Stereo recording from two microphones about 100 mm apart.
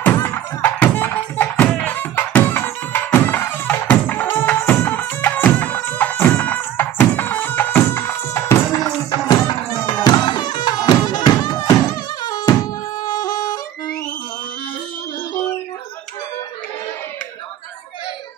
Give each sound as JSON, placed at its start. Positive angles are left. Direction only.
{"t": 0.0, "sound": "music", "side_deg": 25}
{"t": 9.8, "sound": "music", "side_deg": 45}